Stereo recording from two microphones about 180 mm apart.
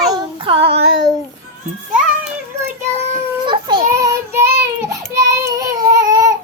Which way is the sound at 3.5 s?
25° right (ahead or behind).